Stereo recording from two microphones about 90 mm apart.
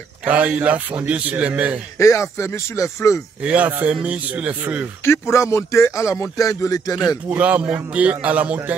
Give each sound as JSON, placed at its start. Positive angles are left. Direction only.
{"t": 0.2, "sound": "a man's voice", "side_deg": -15}
{"t": 2.0, "sound": "speech", "side_deg": 35}
{"t": 3.4, "sound": "a man's voice", "side_deg": -15}
{"t": 5.0, "sound": "speech", "side_deg": 30}
{"t": 7.2, "sound": "a man's voice", "side_deg": -15}